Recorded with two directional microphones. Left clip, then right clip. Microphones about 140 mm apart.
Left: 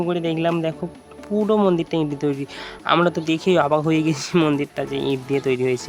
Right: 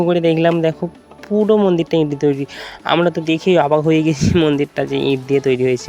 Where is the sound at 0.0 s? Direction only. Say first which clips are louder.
Right 8 dB; 40° right (ahead or behind).